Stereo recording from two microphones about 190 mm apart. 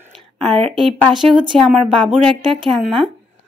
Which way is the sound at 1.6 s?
Centre (ahead or behind).